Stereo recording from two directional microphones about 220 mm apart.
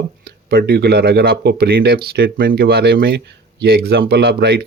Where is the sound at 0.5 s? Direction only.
45° right (ahead or behind).